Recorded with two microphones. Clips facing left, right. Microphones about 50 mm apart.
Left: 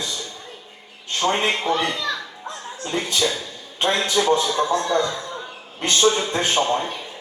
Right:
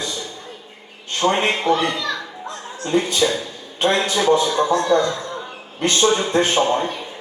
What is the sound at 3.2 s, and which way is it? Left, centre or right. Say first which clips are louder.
A man's voice: right 3 dB; centre.